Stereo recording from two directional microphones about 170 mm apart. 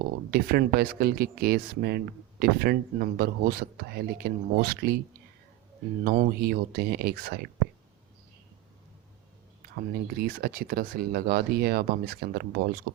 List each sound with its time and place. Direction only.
0.3 s speech: 65° right (ahead or behind)
6.1 s speech: 60° right (ahead or behind)
9.7 s speech: 65° right (ahead or behind)